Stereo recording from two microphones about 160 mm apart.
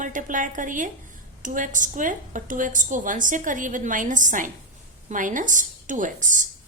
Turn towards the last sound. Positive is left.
turn(degrees=-55)  # may be behind; listen again after turning